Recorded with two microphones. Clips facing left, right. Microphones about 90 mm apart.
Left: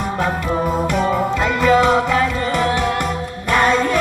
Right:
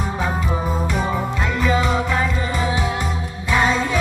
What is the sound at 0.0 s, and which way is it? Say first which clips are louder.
Music: left 3 dB; 65° left (ahead or behind).